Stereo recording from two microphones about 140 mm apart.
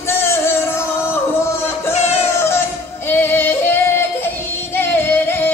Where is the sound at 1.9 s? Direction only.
55° left (ahead or behind).